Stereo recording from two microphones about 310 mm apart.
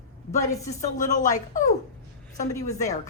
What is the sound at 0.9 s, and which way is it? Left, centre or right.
Speech, left.